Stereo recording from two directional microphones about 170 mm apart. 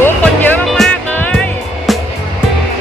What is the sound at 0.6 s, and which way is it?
Music, centre (ahead or behind).